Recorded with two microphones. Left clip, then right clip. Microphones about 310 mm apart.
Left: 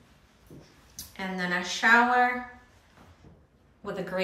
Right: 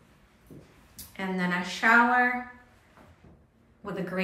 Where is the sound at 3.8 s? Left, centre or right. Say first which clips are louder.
Left 1 dB; centre.